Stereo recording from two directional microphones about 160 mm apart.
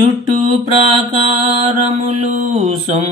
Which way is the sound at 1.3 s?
40° right (ahead or behind).